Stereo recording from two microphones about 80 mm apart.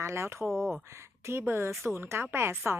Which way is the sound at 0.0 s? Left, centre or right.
Right.